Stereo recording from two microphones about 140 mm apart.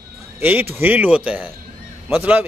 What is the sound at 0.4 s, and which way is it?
Speech, 15° right (ahead or behind).